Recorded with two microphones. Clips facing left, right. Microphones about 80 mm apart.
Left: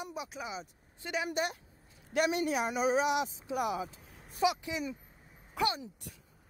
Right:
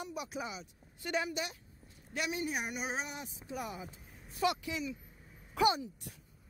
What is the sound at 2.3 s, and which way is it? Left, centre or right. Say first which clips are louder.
Speech: left 6 dB; left.